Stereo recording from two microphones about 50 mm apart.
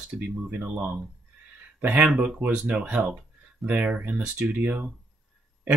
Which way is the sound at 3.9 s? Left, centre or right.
Right.